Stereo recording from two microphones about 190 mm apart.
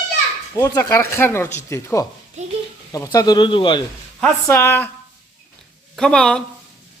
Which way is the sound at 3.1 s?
20° left (ahead or behind).